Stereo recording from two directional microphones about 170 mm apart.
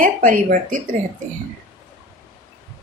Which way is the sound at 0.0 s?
50° right (ahead or behind).